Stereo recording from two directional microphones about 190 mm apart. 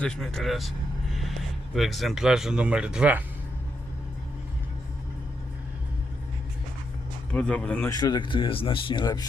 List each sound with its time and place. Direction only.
0.0 s speech: 5° left (ahead or behind)
1.7 s speech: centre (ahead or behind)
7.3 s speech: 5° left (ahead or behind)
7.9 s speech: 20° left (ahead or behind)